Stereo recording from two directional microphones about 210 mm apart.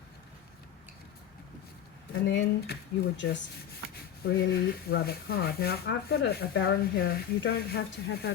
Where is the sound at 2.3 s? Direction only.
50° left (ahead or behind).